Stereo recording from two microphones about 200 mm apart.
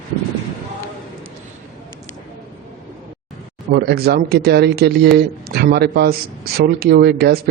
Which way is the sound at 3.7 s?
50° right (ahead or behind).